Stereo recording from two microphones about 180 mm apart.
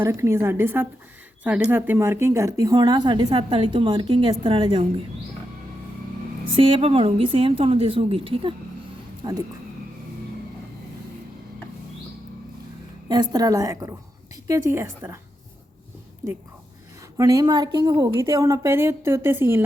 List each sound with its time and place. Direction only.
0.0 s a woman's voice: 15° right (ahead or behind)
6.4 s a woman's voice: 30° right (ahead or behind)
13.1 s a woman's voice: 25° right (ahead or behind)
17.2 s a woman's voice: 20° right (ahead or behind)